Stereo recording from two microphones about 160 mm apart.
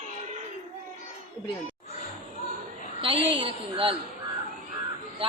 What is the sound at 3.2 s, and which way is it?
Speech, 35° right (ahead or behind).